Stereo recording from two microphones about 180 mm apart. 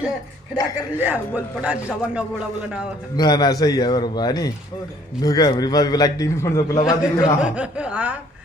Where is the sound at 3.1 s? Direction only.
25° left (ahead or behind).